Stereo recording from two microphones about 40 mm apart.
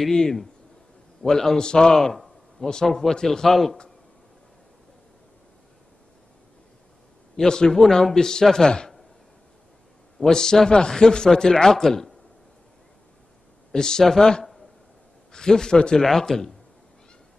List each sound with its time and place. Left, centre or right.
0.1 s a man's voice: centre
7.3 s a man's voice: centre
10.1 s a man's voice: centre
13.7 s a man's voice: centre